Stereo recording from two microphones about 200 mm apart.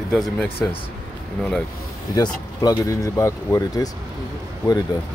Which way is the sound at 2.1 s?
20° left (ahead or behind).